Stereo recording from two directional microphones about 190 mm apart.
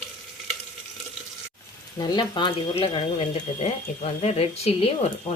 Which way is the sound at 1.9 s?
25° left (ahead or behind).